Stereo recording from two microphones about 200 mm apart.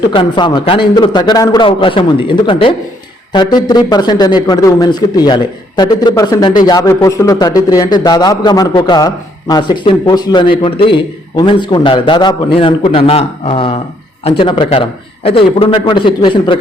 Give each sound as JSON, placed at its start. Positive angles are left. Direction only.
{"t": 0.1, "sound": "a man's voice", "side_deg": 25}